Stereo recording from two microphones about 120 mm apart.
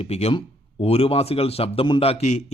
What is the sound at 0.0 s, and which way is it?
A man's voice, 60° left (ahead or behind).